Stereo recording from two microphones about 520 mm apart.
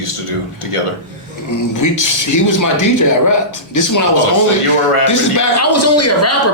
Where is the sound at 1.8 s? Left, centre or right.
Left.